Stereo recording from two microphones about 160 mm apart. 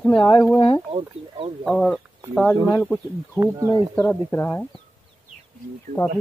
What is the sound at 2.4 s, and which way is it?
Speech, 20° left (ahead or behind).